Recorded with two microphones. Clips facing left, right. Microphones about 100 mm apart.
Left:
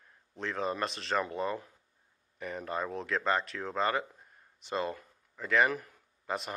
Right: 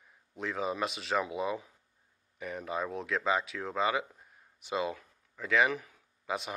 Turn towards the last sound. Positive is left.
turn(degrees=0)  # may be behind; listen again after turning